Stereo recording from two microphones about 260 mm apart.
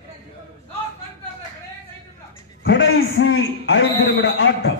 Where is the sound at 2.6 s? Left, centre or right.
Left.